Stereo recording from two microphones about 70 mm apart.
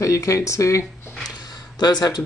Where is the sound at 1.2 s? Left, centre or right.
Left.